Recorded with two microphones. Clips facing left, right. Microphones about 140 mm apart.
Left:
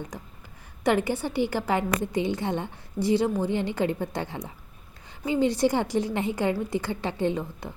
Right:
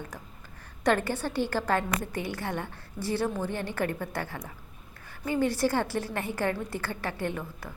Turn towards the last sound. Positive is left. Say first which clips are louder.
# left 6 dB
turn(degrees=20)  # may be behind; listen again after turning